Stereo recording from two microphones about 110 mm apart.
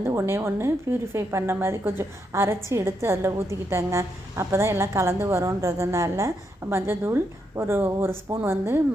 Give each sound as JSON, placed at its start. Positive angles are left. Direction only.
{"t": 0.0, "sound": "a woman's voice", "side_deg": -25}